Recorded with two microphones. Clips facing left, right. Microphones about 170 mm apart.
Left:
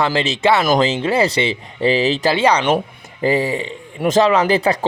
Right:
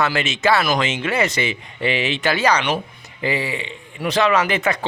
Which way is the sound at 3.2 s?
40° left (ahead or behind).